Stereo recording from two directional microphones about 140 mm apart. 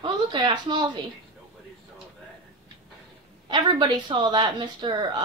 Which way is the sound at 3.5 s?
35° right (ahead or behind).